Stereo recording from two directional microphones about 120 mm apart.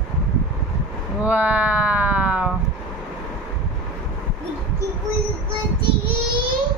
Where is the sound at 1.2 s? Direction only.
15° right (ahead or behind).